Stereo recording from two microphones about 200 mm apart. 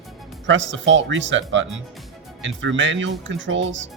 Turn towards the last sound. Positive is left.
turn(degrees=-70)  # may be behind; listen again after turning